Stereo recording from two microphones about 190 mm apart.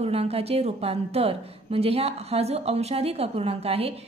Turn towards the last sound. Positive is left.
turn(degrees=-30)  # may be behind; listen again after turning